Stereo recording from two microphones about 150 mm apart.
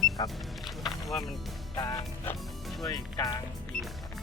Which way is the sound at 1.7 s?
25° left (ahead or behind).